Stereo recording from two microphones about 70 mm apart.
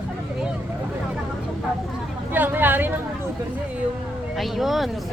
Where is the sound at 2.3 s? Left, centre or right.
Right.